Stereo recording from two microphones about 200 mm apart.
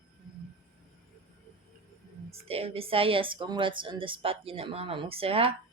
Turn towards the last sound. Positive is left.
turn(degrees=-30)  # may be behind; listen again after turning